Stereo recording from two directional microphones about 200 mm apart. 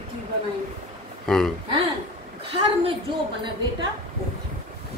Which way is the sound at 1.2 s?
5° left (ahead or behind).